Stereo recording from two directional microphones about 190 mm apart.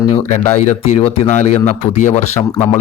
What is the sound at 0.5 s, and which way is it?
Speech, 30° left (ahead or behind).